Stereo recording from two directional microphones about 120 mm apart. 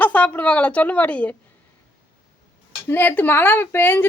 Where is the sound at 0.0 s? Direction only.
15° left (ahead or behind).